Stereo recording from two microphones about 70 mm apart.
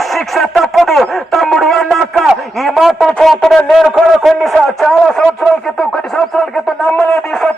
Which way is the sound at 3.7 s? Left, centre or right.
Centre.